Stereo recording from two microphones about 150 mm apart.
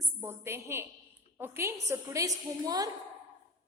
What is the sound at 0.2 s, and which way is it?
A woman's voice, 15° right (ahead or behind).